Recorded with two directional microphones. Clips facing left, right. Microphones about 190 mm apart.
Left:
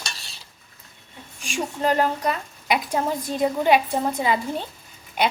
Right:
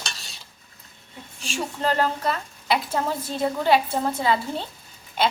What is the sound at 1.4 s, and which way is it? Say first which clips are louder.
A woman's voice: left 2 dB; 15° left (ahead or behind).